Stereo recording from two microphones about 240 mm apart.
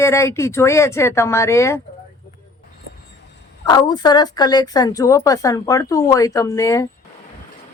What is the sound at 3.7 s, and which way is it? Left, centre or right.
Speech, centre.